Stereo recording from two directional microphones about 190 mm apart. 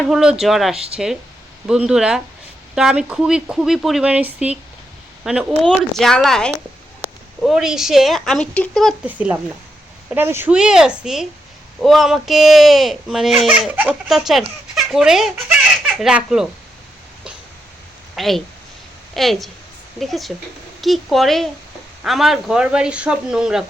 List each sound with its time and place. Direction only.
0.0 s speech: 5° right (ahead or behind)
18.2 s speech: centre (ahead or behind)